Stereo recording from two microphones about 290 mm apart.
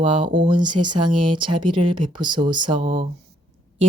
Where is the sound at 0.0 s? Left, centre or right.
Centre.